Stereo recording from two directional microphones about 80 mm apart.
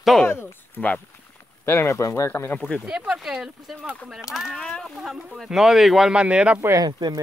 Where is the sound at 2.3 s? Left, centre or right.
Left.